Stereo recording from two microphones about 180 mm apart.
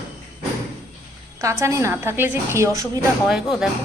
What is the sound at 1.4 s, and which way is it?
A woman's voice, 15° right (ahead or behind).